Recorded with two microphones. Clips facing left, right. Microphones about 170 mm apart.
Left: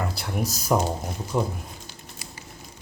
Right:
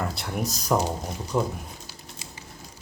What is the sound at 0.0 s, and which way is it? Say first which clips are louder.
Speech: left 1 dB; centre (ahead or behind).